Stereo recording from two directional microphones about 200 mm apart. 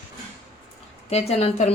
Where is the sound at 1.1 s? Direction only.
30° left (ahead or behind).